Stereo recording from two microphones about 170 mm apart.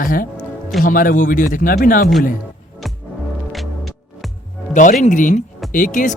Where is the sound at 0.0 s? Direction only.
55° left (ahead or behind).